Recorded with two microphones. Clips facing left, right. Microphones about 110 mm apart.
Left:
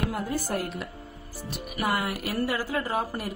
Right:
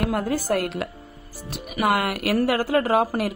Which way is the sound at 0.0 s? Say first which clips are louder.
Right 5 dB; 85° right.